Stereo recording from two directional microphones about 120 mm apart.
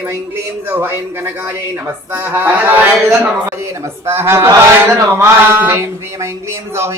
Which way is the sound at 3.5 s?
20° right (ahead or behind).